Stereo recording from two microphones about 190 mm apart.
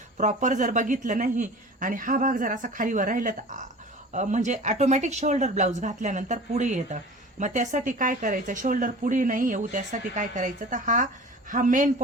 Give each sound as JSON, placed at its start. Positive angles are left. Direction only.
{"t": 0.2, "sound": "speech", "side_deg": -40}